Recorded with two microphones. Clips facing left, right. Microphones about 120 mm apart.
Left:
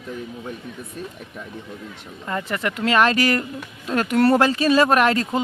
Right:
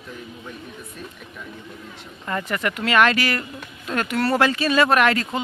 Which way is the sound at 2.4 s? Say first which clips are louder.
Left 3 dB; 25° left (ahead or behind).